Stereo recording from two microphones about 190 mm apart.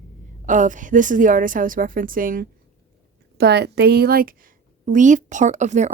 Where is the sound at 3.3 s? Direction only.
60° right (ahead or behind).